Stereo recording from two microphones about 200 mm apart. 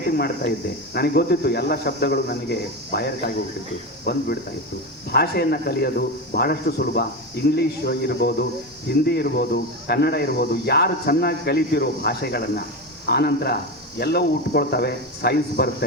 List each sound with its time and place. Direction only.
0.9 s speech: 50° left (ahead or behind)